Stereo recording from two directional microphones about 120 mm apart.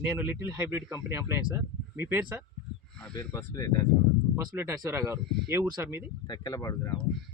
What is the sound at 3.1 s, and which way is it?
Speech, 40° left (ahead or behind).